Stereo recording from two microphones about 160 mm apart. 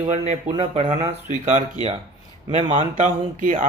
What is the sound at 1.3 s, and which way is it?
Speech, 50° right (ahead or behind).